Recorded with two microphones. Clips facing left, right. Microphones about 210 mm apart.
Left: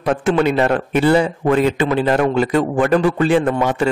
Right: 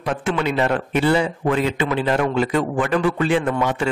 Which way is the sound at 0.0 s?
45° left (ahead or behind).